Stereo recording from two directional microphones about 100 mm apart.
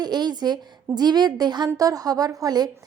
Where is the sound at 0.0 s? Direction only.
45° right (ahead or behind).